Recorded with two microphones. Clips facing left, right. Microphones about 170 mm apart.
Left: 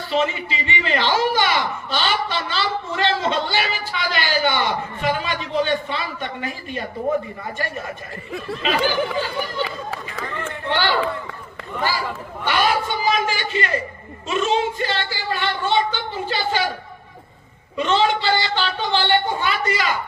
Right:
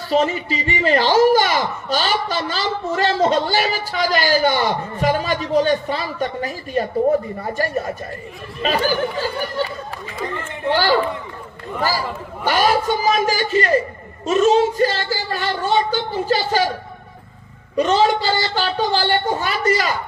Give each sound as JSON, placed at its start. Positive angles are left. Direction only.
{"t": 0.1, "sound": "speech", "side_deg": -40}
{"t": 10.7, "sound": "a man's voice", "side_deg": -40}
{"t": 17.7, "sound": "speech", "side_deg": -40}